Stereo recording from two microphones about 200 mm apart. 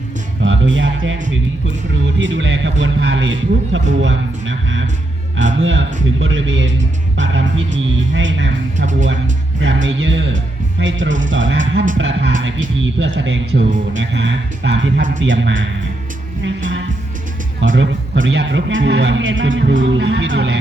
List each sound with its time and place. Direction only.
0.4 s speech: 70° right (ahead or behind)
17.7 s speech: 70° right (ahead or behind)